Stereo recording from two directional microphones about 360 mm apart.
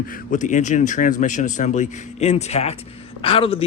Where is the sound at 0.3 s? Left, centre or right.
Left.